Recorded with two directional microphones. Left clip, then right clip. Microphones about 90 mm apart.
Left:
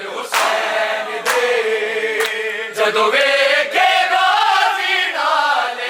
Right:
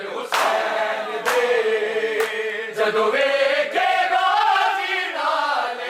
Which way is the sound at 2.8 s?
25° right (ahead or behind).